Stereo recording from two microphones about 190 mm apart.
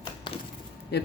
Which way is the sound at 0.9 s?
60° left (ahead or behind).